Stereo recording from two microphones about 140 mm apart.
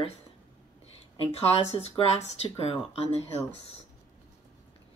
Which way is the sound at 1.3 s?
45° left (ahead or behind).